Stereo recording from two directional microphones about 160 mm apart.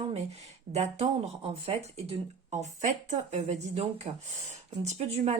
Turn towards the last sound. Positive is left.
turn(degrees=-45)  # may be behind; listen again after turning